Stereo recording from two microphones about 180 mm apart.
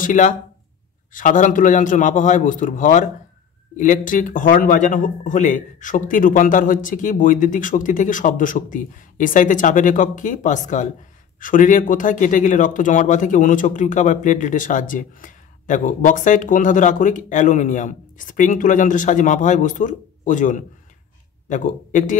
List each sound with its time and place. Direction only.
0.0 s speech: 45° left (ahead or behind)